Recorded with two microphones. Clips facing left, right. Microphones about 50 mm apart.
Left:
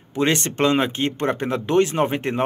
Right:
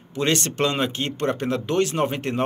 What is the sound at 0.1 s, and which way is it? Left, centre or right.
Speech, left.